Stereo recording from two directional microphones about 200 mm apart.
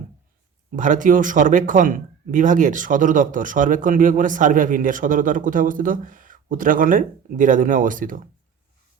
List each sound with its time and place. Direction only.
0.8 s speech: 40° right (ahead or behind)